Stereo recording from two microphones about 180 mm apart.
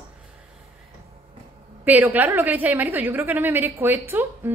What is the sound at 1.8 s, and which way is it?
A woman's voice, 10° right (ahead or behind).